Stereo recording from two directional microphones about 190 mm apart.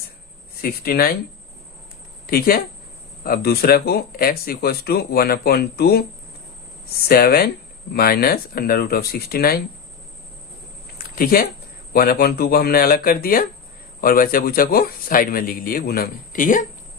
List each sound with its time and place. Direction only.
0.6 s speech: 50° left (ahead or behind)
2.2 s speech: 50° left (ahead or behind)
7.1 s speech: 55° left (ahead or behind)
10.9 s a sound: 50° left (ahead or behind)
11.9 s speech: 55° left (ahead or behind)